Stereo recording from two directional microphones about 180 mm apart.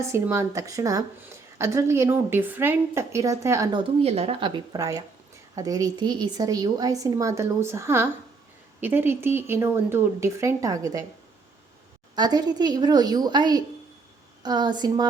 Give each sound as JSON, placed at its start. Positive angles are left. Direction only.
{"t": 0.0, "sound": "a woman's voice", "side_deg": -15}
{"t": 12.1, "sound": "a woman's voice", "side_deg": -20}